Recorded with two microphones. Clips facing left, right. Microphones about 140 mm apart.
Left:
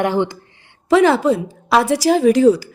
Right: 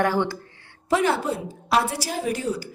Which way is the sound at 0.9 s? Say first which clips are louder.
Left 9 dB; 90° left.